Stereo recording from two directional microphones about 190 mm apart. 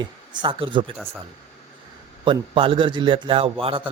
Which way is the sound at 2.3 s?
25° right (ahead or behind).